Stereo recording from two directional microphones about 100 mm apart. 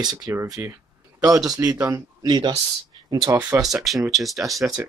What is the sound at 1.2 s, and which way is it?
Speech, 35° right (ahead or behind).